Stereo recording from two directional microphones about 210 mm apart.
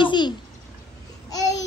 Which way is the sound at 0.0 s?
20° left (ahead or behind).